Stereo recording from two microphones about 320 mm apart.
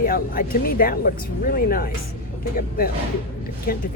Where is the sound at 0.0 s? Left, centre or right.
Left.